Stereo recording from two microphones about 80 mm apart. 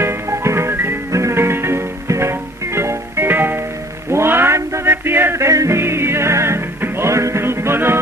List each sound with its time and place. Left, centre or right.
0.0 s music: right